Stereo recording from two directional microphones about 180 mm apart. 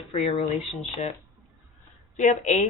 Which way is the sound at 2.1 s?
40° left (ahead or behind).